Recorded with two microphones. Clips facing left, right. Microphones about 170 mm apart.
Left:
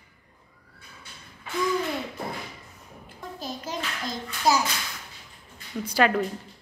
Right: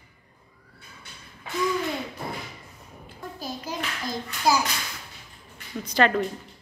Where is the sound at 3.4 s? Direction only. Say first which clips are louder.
Even; centre (ahead or behind).